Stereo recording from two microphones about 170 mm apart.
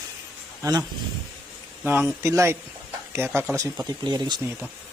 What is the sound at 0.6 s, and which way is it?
A man's voice, 20° right (ahead or behind).